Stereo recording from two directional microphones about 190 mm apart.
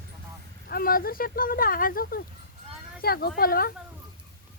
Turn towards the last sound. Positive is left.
turn(degrees=50)  # may be behind; listen again after turning